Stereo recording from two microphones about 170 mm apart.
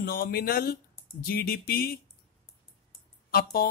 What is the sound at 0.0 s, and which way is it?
Speech, 65° left (ahead or behind).